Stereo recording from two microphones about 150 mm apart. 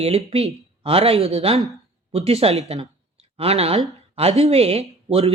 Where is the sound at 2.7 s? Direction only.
40° right (ahead or behind).